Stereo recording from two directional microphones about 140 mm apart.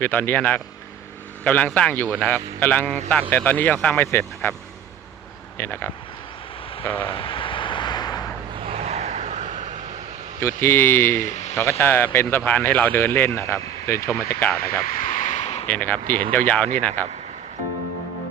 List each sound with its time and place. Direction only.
0.0 s speech: 15° left (ahead or behind)
5.5 s speech: 15° left (ahead or behind)
7.1 s vehicle: 40° left (ahead or behind)
8.6 s vehicle: 50° right (ahead or behind)
10.4 s speech: 15° left (ahead or behind)
11.2 s speech: 60° left (ahead or behind)
11.5 s speech: 20° left (ahead or behind)
15.1 s a sound: 60° left (ahead or behind)
15.6 s speech: 10° left (ahead or behind)